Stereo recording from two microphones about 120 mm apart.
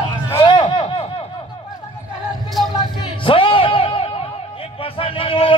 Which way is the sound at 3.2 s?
50° left (ahead or behind).